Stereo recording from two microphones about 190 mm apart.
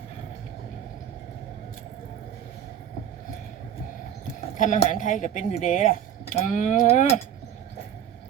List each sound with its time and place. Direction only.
4.5 s speech: 40° left (ahead or behind)